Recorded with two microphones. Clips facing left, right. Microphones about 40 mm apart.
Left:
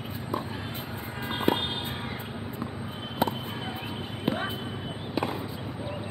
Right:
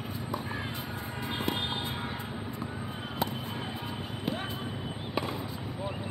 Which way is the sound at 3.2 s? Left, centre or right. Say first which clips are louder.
Left 6 dB; centre.